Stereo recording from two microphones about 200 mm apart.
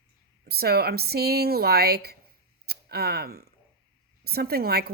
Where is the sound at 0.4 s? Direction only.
50° right (ahead or behind).